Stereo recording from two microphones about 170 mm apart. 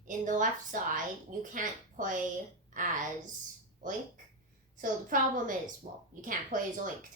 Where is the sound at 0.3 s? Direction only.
50° right (ahead or behind).